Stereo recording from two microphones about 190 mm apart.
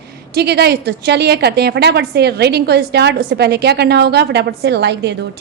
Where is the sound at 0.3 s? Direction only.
60° right (ahead or behind).